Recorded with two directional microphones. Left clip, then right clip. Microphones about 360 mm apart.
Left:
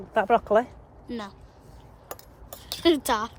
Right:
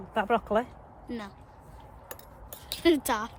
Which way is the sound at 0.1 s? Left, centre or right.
Left.